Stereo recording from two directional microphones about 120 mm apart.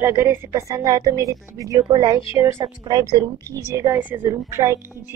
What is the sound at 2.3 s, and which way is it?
A woman's voice, 25° right (ahead or behind).